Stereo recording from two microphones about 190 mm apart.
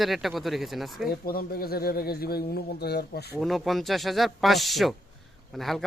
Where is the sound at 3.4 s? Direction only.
Centre (ahead or behind).